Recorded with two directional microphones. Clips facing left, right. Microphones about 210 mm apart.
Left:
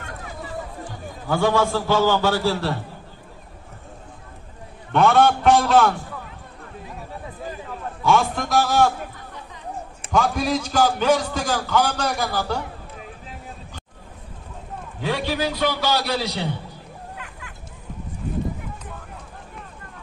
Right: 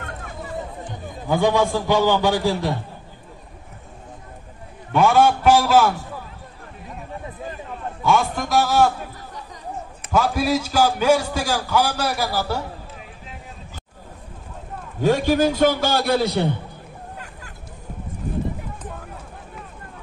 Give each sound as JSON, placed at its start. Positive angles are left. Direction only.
{"t": 0.0, "sound": "a sound", "side_deg": -50}
{"t": 0.6, "sound": "a man's voice", "side_deg": -20}
{"t": 4.9, "sound": "a man's voice", "side_deg": -5}
{"t": 8.0, "sound": "a man's voice", "side_deg": 0}
{"t": 10.1, "sound": "a man's voice", "side_deg": -5}
{"t": 15.0, "sound": "a man's voice", "side_deg": -45}